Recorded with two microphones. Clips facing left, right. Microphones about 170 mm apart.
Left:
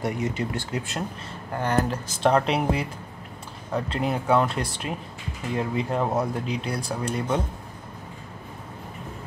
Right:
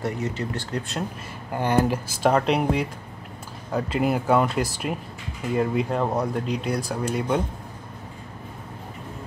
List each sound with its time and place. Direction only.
0.0 s speech: 15° left (ahead or behind)
1.5 s speech: 15° right (ahead or behind)